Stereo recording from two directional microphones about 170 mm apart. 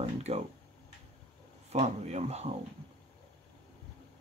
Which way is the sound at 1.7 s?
40° right (ahead or behind).